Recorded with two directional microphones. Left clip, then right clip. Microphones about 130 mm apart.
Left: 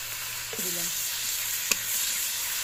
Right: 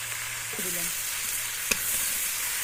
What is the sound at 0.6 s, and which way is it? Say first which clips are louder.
Frying: left 3 dB; 25° right (ahead or behind).